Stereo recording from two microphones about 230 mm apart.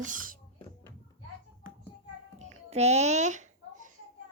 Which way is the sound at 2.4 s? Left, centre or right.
Right.